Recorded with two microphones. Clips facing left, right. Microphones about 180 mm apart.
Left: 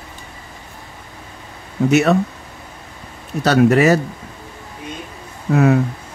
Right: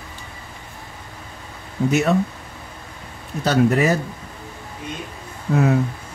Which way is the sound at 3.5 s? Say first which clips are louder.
Left 5 dB; 75° left (ahead or behind).